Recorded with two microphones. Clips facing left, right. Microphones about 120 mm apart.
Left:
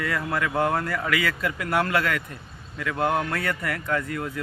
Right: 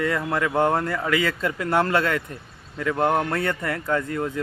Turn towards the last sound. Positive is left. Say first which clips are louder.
# right 3 dB
turn(degrees=-25)  # may be behind; listen again after turning